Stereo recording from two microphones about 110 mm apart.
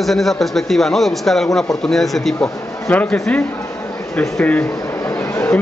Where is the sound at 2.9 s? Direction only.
15° left (ahead or behind).